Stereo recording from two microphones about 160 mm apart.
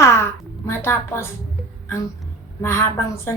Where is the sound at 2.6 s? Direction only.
15° left (ahead or behind).